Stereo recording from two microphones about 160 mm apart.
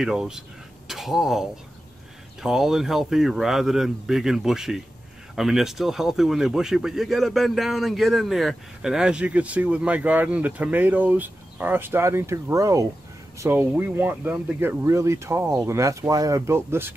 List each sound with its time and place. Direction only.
0.0 s speech: 5° right (ahead or behind)